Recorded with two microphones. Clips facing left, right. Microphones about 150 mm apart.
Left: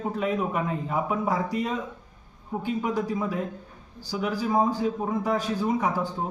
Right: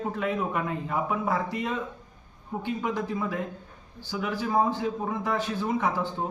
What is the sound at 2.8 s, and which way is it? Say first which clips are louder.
A man's voice: left 1 dB; 10° left (ahead or behind).